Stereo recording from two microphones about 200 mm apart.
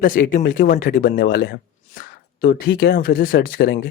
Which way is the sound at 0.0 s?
45° left (ahead or behind).